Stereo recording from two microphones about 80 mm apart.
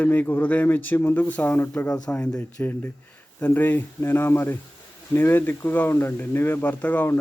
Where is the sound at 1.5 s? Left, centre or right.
Left.